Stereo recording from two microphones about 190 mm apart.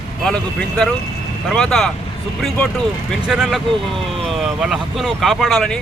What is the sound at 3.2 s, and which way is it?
Speech, 5° right (ahead or behind).